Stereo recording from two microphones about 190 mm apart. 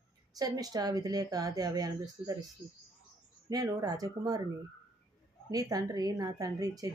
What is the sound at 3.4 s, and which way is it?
Speech, 20° right (ahead or behind).